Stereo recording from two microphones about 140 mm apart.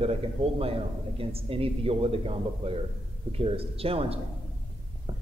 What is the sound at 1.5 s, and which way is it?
Speech, 45° right (ahead or behind).